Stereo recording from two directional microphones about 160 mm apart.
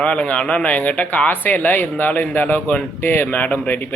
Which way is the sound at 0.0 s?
5° left (ahead or behind).